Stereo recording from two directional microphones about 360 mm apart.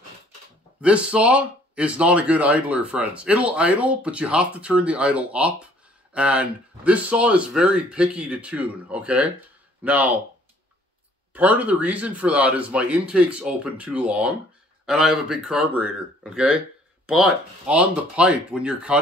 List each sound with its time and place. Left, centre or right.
0.7 s speech: centre
11.3 s speech: centre